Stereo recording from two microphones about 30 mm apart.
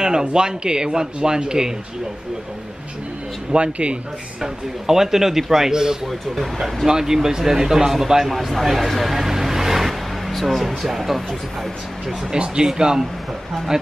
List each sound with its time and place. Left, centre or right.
0.0 s speech: right
3.5 s speech: right
4.4 s a man's voice: centre
6.3 s speech: centre
6.9 s a man's voice: centre
9.0 s vehicle: centre
9.8 s a sound: centre
10.9 s speech: centre
12.6 s speech: right